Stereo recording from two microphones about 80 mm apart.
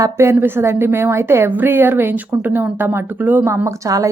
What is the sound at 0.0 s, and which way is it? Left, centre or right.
A woman's voice, right.